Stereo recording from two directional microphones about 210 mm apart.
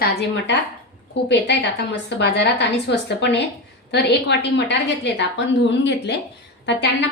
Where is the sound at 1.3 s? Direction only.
55° left (ahead or behind).